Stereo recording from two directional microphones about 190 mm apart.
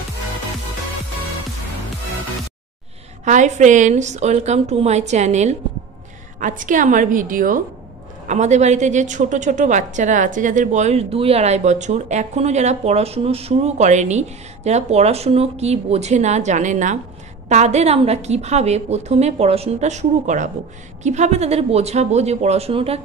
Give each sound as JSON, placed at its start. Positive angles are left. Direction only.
{"t": 3.3, "sound": "a woman's voice", "side_deg": -40}